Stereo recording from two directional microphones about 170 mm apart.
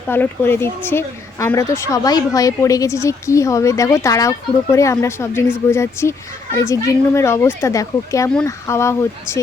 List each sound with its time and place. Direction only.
0.1 s speech: 15° left (ahead or behind)